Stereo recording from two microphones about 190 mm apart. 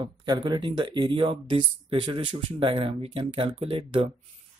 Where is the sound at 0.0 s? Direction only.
25° right (ahead or behind).